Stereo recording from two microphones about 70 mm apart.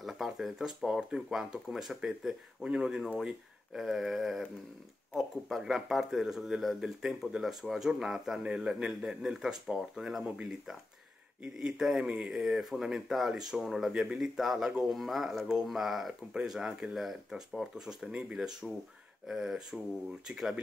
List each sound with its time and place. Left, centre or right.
0.0 s speech: centre
5.5 s speech: centre
10.2 s speech: centre